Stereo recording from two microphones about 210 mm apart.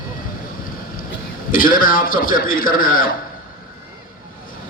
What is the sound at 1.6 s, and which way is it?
A man's voice, 40° left (ahead or behind).